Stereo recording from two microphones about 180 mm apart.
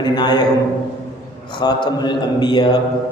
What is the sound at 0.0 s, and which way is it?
Speech, 25° left (ahead or behind).